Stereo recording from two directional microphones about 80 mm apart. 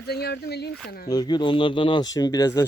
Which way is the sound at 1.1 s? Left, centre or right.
Left.